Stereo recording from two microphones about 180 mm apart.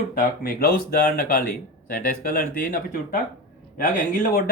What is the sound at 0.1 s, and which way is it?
Speech, 50° left (ahead or behind).